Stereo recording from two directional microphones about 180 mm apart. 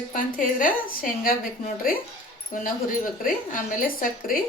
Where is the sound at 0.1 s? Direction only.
50° left (ahead or behind).